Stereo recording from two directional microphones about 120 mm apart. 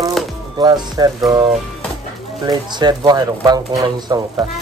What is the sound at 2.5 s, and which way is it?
Speech, 35° right (ahead or behind).